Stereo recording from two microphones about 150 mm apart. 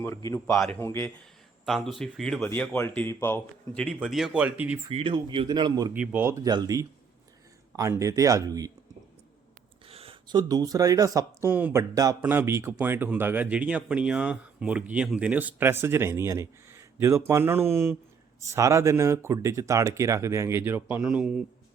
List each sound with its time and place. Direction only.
0.0 s speech: 20° left (ahead or behind)
1.6 s speech: centre (ahead or behind)
2.5 s speech: 15° left (ahead or behind)
4.0 s speech: 5° right (ahead or behind)
4.9 s speech: 40° right (ahead or behind)
5.9 s speech: 10° right (ahead or behind)
9.8 s speech: 40° right (ahead or behind); by 21.4 s 5° right (ahead or behind)